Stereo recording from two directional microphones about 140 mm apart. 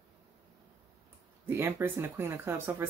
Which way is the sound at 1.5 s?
15° right (ahead or behind).